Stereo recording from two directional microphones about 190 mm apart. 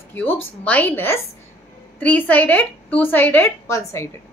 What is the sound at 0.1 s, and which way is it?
A woman's voice, 10° left (ahead or behind).